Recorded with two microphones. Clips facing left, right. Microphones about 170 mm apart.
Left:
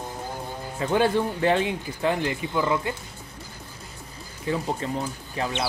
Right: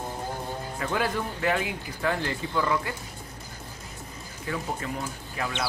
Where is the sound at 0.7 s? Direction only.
25° left (ahead or behind).